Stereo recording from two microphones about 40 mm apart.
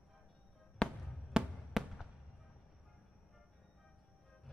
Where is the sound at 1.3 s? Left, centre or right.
Right.